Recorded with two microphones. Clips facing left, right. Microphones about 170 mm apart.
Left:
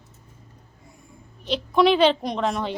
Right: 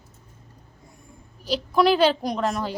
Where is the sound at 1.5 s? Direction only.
5° right (ahead or behind).